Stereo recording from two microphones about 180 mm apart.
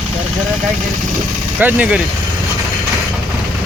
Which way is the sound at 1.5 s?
10° right (ahead or behind).